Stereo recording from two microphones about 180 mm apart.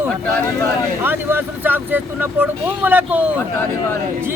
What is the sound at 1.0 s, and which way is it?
Speech, 10° right (ahead or behind).